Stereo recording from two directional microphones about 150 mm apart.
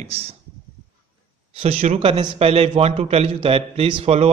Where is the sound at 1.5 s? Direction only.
45° right (ahead or behind).